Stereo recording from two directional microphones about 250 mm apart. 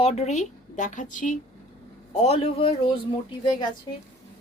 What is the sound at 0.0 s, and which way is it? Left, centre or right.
A woman's voice, left.